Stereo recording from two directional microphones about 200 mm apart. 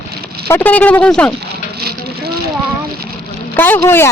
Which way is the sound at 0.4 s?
10° left (ahead or behind).